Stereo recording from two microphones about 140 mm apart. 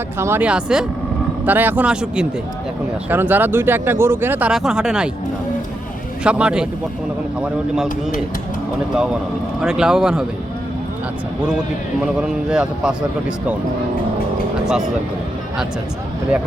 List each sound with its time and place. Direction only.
0.2 s a man's voice: 15° right (ahead or behind)
6.2 s a man's voice: 5° right (ahead or behind)
9.6 s speech: 5° right (ahead or behind)
11.4 s a man's voice: 5° right (ahead or behind)